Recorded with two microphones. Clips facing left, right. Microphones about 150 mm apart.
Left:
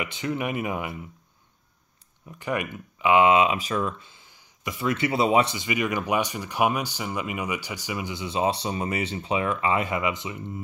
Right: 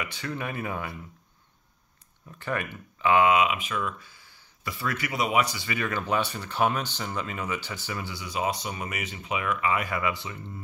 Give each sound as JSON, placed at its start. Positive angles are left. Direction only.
{"t": 0.0, "sound": "speech", "side_deg": 20}
{"t": 2.2, "sound": "speech", "side_deg": 15}
{"t": 4.0, "sound": "speech", "side_deg": 20}